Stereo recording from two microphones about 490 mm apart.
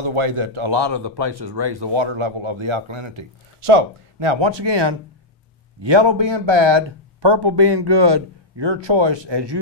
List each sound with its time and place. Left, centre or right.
0.0 s speech: right